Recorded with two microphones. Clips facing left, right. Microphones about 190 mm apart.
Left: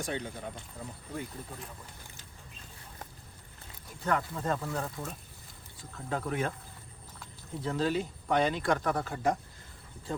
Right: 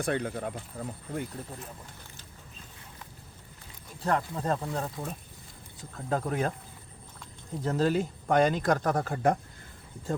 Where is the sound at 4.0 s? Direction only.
35° right (ahead or behind).